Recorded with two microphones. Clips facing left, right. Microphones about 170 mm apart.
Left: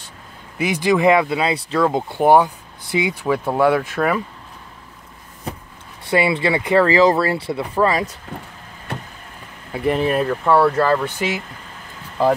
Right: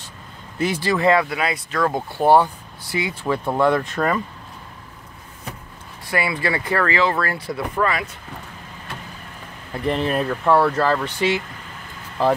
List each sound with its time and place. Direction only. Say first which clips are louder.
0.6 s speech: left 4 dB; 15° left (ahead or behind)
6.0 s speech: left 5 dB; 25° left (ahead or behind)
6.9 s speech: left 6 dB; 35° left (ahead or behind)
9.7 s speech: left 3 dB; 5° left (ahead or behind)